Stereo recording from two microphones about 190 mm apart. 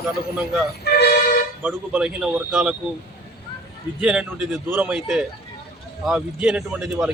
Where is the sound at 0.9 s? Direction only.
60° left (ahead or behind).